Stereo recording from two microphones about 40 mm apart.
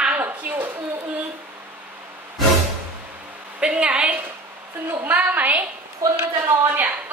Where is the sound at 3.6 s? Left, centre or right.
Right.